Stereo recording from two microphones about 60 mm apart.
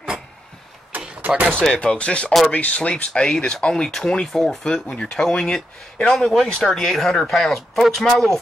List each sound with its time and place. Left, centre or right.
0.9 s a sound: right
1.5 s speech: centre
4.8 s speech: centre